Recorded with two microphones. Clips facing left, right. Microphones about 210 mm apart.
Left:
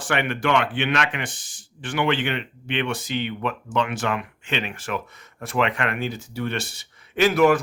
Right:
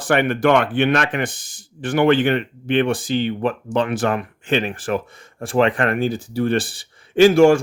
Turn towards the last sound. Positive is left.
turn(degrees=-30)  # may be behind; listen again after turning